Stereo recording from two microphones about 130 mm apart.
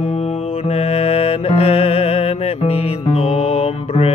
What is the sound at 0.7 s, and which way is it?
Music, 50° left (ahead or behind).